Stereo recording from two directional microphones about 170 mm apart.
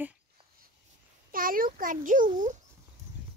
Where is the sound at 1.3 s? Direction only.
55° right (ahead or behind).